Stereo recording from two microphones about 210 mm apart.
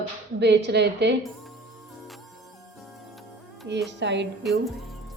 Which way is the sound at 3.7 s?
55° right (ahead or behind).